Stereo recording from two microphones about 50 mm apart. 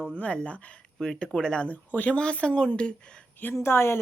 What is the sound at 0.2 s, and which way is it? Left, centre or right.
Speech, left.